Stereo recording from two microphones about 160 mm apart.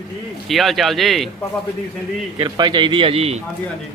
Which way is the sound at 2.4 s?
30° right (ahead or behind).